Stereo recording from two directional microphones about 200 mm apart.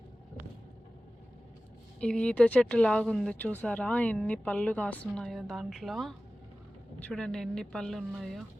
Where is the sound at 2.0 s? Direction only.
5° left (ahead or behind).